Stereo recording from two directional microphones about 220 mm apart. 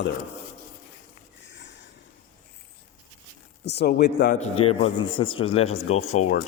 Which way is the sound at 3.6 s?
50° left (ahead or behind).